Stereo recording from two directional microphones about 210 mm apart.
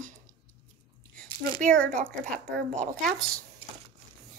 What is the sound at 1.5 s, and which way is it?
Speech, 40° right (ahead or behind).